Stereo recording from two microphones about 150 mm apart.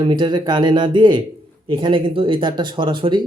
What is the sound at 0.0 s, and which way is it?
Speech, 30° right (ahead or behind).